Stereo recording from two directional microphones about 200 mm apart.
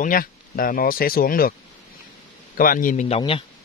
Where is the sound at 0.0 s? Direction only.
45° left (ahead or behind).